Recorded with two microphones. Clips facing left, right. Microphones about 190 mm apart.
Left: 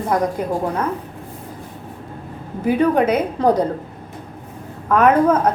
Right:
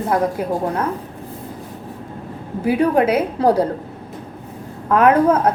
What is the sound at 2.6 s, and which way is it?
A woman's voice, 10° right (ahead or behind).